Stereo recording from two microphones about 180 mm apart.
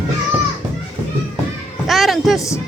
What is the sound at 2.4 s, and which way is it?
Speech, 15° left (ahead or behind).